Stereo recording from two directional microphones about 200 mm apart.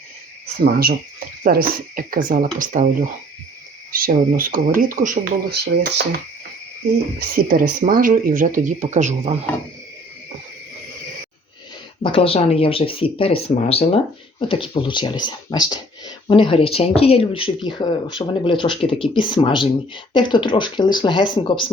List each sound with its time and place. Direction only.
0.6 s speech: 50° right (ahead or behind)
7.2 s speech: 45° right (ahead or behind)
12.0 s speech: 25° left (ahead or behind)